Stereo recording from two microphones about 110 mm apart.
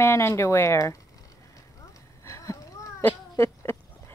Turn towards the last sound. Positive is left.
turn(degrees=25)  # may be behind; listen again after turning